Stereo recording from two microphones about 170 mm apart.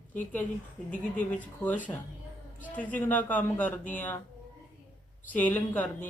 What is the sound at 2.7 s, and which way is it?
Speech, 10° left (ahead or behind).